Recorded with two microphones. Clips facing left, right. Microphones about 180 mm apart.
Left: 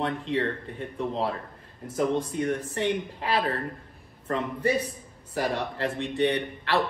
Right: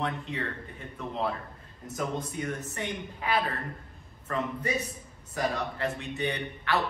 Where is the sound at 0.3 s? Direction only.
30° left (ahead or behind).